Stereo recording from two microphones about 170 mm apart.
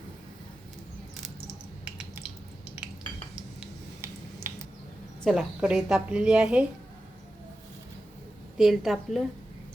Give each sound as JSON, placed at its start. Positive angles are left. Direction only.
{"t": 1.8, "sound": "a sound", "side_deg": -10}
{"t": 4.0, "sound": "finger snapping", "side_deg": -15}
{"t": 5.2, "sound": "a woman's voice", "side_deg": 0}
{"t": 8.5, "sound": "a woman's voice", "side_deg": 0}